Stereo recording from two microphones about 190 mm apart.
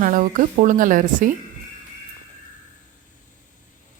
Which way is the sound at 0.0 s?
45° right (ahead or behind).